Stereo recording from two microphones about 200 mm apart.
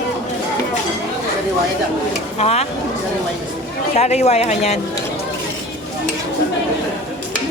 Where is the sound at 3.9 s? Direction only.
35° left (ahead or behind).